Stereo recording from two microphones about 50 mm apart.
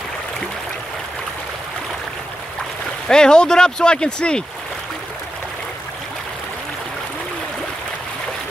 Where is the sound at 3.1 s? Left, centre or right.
Centre.